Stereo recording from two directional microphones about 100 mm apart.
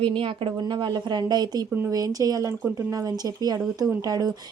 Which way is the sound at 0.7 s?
45° right (ahead or behind).